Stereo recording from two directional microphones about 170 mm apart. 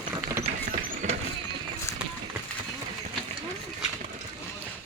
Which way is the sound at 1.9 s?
15° left (ahead or behind).